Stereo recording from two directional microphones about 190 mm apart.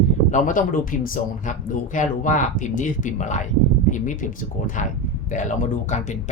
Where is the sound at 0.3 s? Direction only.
40° left (ahead or behind).